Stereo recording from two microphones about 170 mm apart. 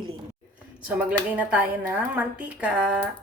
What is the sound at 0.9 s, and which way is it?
A woman's voice, 10° right (ahead or behind).